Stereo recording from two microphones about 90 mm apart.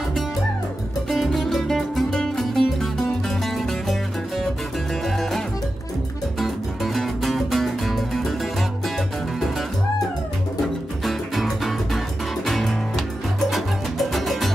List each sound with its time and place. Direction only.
1.0 s music: centre (ahead or behind)
5.0 s music: centre (ahead or behind)
6.4 s music: centre (ahead or behind)
11.1 s music: centre (ahead or behind)